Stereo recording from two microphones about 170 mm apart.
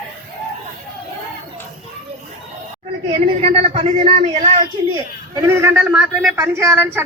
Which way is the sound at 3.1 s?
35° right (ahead or behind).